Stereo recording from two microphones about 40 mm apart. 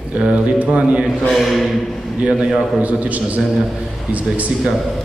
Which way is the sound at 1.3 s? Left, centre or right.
Centre.